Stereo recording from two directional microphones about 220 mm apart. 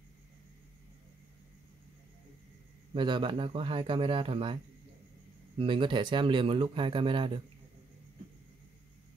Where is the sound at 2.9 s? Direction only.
20° right (ahead or behind).